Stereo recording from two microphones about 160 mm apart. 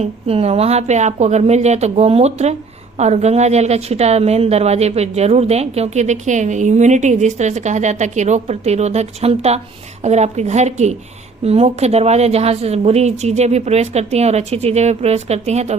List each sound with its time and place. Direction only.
0.0 s a woman's voice: 40° right (ahead or behind)